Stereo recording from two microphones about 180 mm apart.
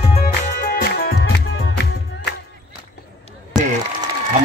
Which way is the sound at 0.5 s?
60° left (ahead or behind).